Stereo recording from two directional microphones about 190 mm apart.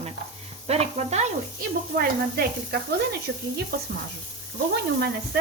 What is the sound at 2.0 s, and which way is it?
Speech, 55° right (ahead or behind).